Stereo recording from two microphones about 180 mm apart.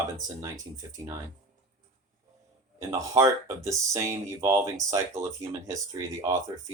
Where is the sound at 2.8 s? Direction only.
20° right (ahead or behind).